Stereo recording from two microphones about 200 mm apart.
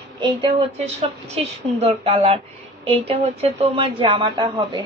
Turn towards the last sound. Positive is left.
turn(degrees=-25)  # may be behind; listen again after turning